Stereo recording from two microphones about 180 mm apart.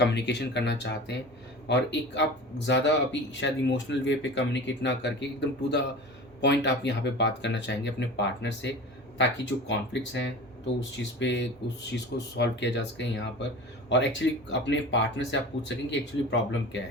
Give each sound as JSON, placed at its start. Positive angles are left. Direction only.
{"t": 0.0, "sound": "speech", "side_deg": 70}